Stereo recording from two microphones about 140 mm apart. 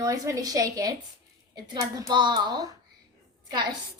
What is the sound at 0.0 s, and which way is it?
A woman's voice, 25° right (ahead or behind).